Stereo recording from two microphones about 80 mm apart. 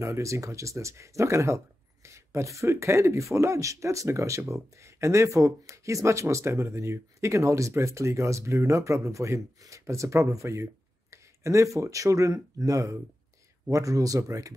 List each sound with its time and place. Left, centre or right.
0.0 s speech: right